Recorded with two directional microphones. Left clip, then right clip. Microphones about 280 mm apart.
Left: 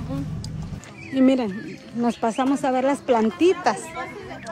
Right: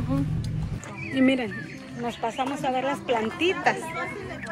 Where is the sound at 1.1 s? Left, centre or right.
Centre.